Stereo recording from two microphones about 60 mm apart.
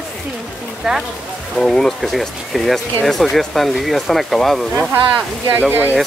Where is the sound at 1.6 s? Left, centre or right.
Centre.